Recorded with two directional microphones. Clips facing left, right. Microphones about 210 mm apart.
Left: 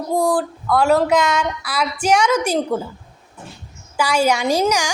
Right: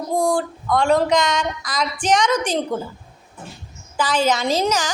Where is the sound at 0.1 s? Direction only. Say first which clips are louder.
Left 2 dB; 5° left (ahead or behind).